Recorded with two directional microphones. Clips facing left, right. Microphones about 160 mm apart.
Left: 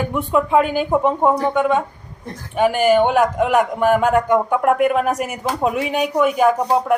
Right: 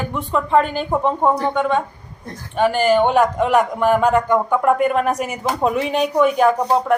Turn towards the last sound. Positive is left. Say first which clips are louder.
# even
turn(degrees=5)  # may be behind; listen again after turning